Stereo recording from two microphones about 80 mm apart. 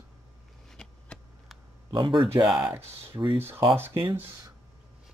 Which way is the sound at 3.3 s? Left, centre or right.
Right.